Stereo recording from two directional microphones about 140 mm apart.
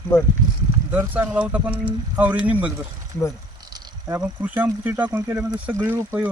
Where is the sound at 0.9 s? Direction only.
10° right (ahead or behind).